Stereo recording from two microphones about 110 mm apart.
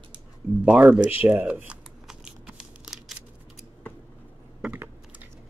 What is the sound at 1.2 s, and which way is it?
Crumpling, 15° right (ahead or behind).